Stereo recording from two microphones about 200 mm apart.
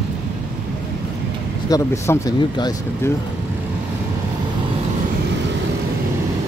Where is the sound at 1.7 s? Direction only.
20° left (ahead or behind).